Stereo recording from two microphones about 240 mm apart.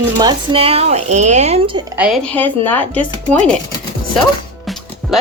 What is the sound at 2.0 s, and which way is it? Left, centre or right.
Speech, centre.